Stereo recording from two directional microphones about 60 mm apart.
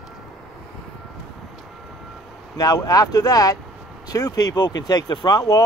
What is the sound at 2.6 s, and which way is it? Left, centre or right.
Speech, left.